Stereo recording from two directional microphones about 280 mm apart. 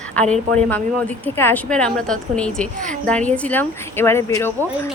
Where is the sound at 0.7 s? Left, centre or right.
Centre.